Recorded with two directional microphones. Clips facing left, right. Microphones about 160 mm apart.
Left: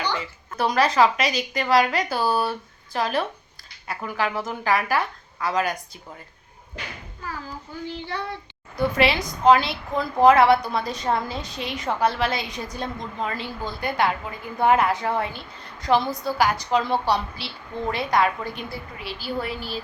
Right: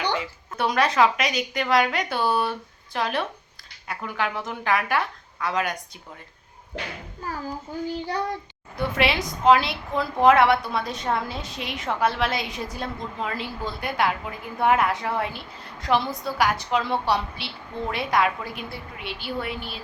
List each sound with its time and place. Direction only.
0.5 s a woman's voice: centre (ahead or behind)
7.9 s a child's voice: 40° right (ahead or behind)
8.7 s a woman's voice: centre (ahead or behind)